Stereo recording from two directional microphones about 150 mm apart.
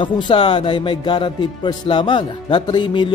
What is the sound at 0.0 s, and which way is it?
Speech, 35° left (ahead or behind).